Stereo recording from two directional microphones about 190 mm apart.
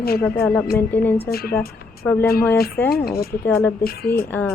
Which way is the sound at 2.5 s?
55° left (ahead or behind).